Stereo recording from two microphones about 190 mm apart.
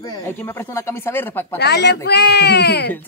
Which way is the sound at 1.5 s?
65° left (ahead or behind).